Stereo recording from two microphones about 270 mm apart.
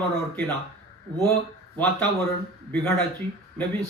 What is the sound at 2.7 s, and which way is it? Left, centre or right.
Speech, centre.